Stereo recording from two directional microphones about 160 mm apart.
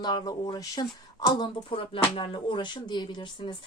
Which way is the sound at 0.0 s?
25° left (ahead or behind).